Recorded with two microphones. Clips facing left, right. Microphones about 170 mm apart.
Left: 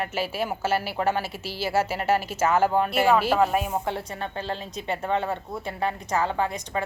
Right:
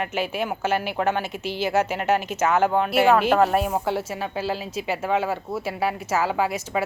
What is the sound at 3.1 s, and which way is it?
Speech, 50° right (ahead or behind).